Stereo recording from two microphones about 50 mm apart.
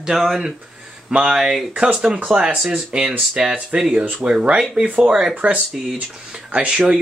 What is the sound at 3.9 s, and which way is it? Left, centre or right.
Speech, right.